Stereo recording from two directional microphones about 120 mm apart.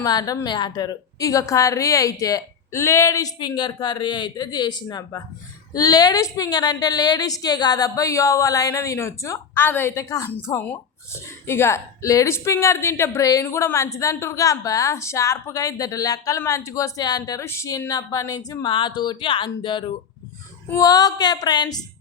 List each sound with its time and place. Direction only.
0.0 s a woman's voice: 30° left (ahead or behind)
10.2 s a woman's voice: 15° left (ahead or behind); by 19.9 s 40° left (ahead or behind)
20.7 s a woman's voice: 30° left (ahead or behind)